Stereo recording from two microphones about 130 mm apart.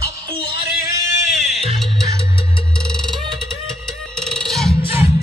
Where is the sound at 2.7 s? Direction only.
5° left (ahead or behind).